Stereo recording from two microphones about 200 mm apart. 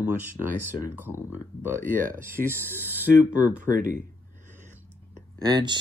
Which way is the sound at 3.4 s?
40° right (ahead or behind).